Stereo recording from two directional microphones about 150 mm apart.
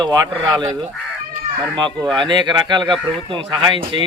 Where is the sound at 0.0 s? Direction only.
25° right (ahead or behind).